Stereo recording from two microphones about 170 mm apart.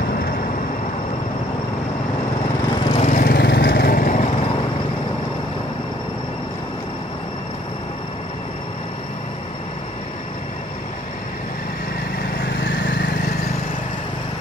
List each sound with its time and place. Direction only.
2.9 s lawn mower: 40° left (ahead or behind)
3.2 s lawn mower: 65° left (ahead or behind); by 4.5 s 45° left (ahead or behind)
12.6 s vehicle: 85° left